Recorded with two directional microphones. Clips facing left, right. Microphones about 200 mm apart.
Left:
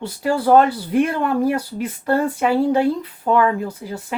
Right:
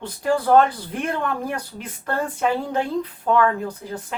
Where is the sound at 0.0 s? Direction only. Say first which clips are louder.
Left 2 dB; 10° left (ahead or behind).